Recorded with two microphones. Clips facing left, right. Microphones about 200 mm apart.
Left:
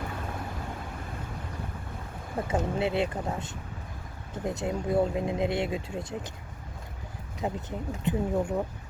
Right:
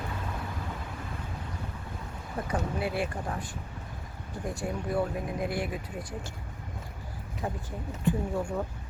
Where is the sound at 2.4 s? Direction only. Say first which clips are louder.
Left 3 dB; 25° left (ahead or behind).